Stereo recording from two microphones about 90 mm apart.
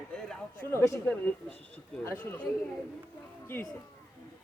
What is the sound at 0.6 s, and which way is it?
Speech, 30° left (ahead or behind).